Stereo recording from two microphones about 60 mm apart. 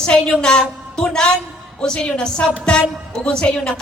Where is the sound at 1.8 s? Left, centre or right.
Centre.